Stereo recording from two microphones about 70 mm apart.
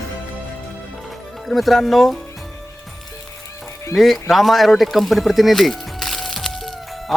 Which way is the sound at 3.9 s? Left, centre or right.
Centre.